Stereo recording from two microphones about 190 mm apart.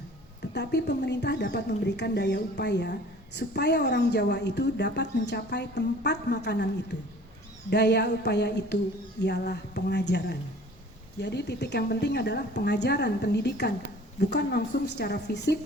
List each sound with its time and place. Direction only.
0.5 s a woman's voice: 60° left (ahead or behind)
7.7 s a woman's voice: 60° left (ahead or behind)